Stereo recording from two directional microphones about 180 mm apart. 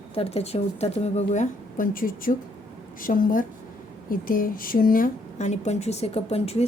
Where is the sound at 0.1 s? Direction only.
35° left (ahead or behind).